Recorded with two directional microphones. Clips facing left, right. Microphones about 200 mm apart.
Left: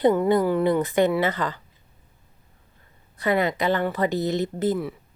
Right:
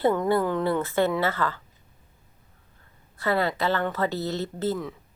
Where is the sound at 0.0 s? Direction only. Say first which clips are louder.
Left 3 dB; 15° left (ahead or behind).